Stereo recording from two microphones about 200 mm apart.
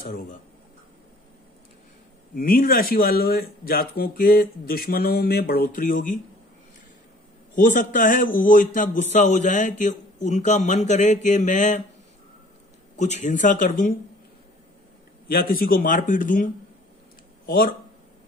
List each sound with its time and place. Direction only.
2.3 s speech: 45° left (ahead or behind)
7.5 s a man's voice: 40° left (ahead or behind)
12.9 s a man's voice: 35° left (ahead or behind)
15.2 s speech: 45° left (ahead or behind)
17.5 s speech: 45° left (ahead or behind)